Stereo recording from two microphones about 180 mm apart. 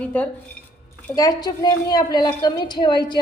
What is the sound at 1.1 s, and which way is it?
A woman's voice, 20° left (ahead or behind).